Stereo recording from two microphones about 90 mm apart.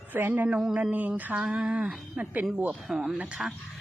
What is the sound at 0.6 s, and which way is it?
Speech, 5° right (ahead or behind).